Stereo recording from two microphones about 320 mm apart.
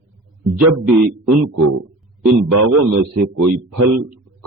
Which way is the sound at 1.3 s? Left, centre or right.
Right.